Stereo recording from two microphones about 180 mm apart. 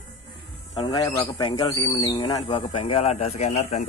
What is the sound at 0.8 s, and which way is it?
Speech, 20° left (ahead or behind).